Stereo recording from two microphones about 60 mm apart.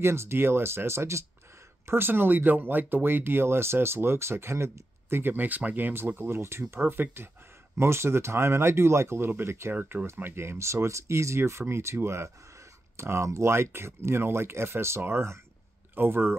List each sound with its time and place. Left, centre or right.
0.0 s speech: right
1.9 s speech: right